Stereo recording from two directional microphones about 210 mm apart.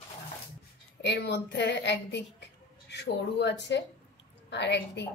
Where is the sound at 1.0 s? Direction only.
55° left (ahead or behind).